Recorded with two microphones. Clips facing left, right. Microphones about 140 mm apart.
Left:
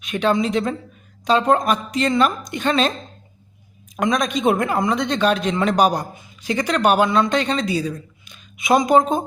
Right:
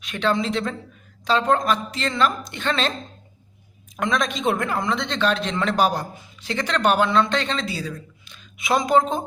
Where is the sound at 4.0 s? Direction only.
15° left (ahead or behind).